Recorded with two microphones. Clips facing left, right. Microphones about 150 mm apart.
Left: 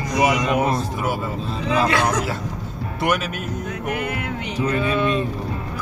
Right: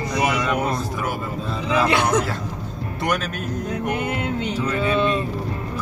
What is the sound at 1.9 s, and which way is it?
Speech, 25° right (ahead or behind).